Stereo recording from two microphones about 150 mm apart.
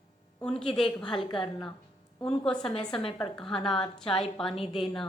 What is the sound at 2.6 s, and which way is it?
A woman's voice, 5° left (ahead or behind).